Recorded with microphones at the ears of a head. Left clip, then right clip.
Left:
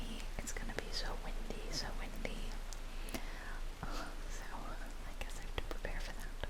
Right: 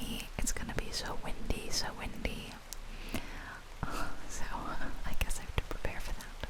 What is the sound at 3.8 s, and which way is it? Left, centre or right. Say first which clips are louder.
Whispering: right 7 dB; right.